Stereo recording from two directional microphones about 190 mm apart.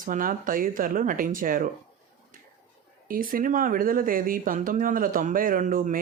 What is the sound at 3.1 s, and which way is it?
Speech, 45° right (ahead or behind).